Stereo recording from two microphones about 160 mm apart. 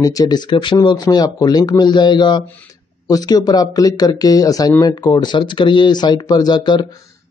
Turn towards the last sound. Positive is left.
turn(degrees=25)  # may be behind; listen again after turning